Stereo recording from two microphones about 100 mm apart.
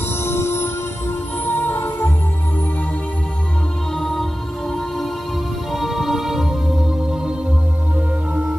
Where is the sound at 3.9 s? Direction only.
5° left (ahead or behind).